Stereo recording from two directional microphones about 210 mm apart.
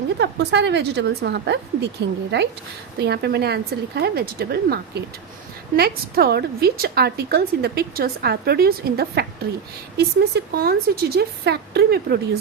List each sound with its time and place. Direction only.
0.2 s a woman's voice: 55° right (ahead or behind)